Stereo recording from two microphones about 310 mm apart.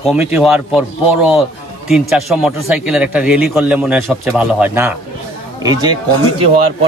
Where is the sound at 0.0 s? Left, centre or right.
Centre.